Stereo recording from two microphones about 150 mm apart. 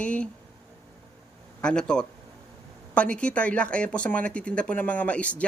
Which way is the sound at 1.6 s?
5° left (ahead or behind).